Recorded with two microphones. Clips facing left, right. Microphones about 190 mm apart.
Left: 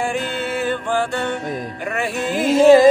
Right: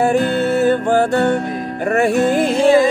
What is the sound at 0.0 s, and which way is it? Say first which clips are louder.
Music: right 8 dB; 45° right (ahead or behind).